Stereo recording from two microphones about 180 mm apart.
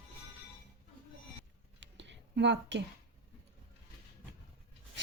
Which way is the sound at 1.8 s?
90° right.